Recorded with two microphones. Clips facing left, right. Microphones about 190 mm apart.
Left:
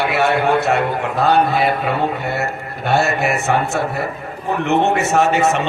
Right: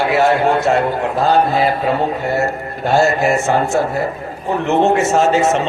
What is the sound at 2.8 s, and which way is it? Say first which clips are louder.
A man's voice: right 3 dB; 65° left (ahead or behind).